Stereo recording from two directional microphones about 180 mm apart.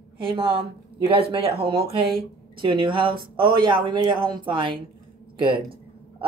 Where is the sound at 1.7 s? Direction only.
30° right (ahead or behind).